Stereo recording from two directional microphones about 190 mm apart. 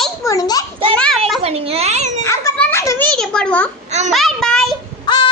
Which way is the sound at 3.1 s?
5° left (ahead or behind).